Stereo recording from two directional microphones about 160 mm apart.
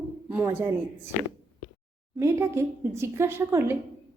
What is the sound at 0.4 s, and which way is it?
Speech, 15° right (ahead or behind).